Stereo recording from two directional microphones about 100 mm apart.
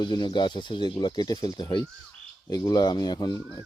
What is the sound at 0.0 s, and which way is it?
Speech, 45° left (ahead or behind).